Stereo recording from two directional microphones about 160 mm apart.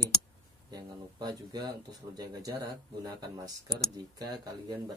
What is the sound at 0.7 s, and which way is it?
Speech, 25° right (ahead or behind).